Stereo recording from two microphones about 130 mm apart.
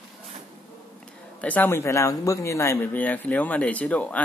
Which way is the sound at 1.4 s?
10° left (ahead or behind).